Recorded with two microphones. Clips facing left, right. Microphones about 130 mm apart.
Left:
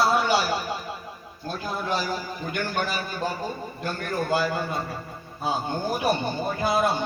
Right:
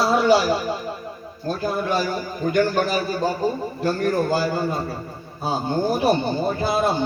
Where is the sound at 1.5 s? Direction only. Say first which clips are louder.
Right 5 dB; 50° right (ahead or behind).